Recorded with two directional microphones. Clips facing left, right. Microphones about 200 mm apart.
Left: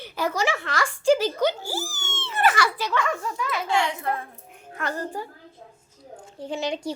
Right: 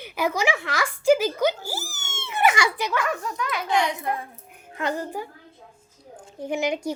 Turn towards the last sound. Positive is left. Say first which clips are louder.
# right 3 dB
turn(degrees=-10)  # may be behind; listen again after turning